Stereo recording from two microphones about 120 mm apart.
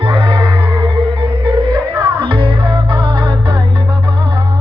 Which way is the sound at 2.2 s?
50° right (ahead or behind).